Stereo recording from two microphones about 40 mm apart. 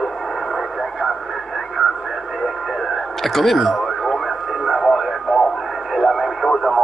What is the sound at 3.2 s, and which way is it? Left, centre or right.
Radio, centre.